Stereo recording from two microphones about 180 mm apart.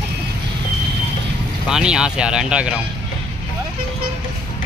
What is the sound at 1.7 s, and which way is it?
Speech, 5° right (ahead or behind).